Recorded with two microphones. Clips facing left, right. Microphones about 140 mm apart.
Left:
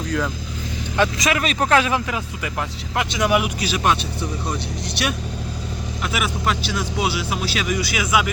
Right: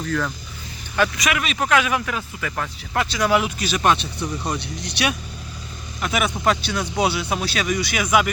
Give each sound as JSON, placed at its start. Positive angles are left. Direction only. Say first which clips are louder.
{"t": 0.9, "sound": "a man's voice", "louder": "left 1 dB", "side_deg": 25}
{"t": 1.4, "sound": "speech", "louder": "left 2 dB", "side_deg": 35}
{"t": 2.0, "sound": "speech", "louder": "left 1 dB", "side_deg": 20}